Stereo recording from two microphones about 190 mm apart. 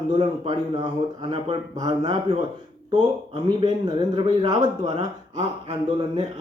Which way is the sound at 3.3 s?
25° right (ahead or behind).